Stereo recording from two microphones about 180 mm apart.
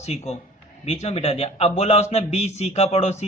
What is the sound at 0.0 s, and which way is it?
A man's voice, 40° left (ahead or behind).